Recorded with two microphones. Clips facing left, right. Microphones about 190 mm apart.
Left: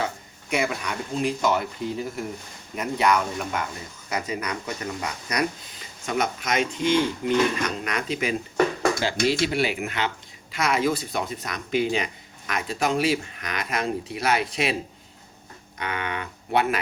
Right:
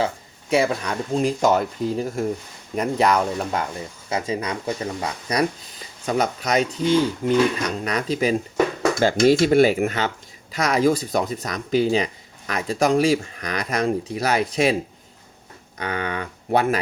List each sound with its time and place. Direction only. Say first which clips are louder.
0.5 s speech: right 6 dB; 35° right (ahead or behind)
9.0 s speech: right 7 dB; 50° right (ahead or behind)
15.8 s speech: right 4 dB; 35° right (ahead or behind)